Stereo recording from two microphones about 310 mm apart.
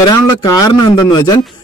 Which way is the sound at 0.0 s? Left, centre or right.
Centre.